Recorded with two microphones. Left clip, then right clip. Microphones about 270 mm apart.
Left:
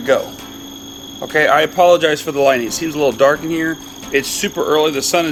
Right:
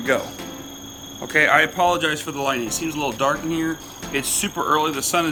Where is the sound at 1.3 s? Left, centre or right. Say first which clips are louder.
Left 3 dB; centre.